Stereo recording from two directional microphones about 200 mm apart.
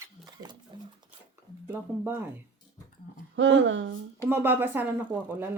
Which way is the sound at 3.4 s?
65° right (ahead or behind).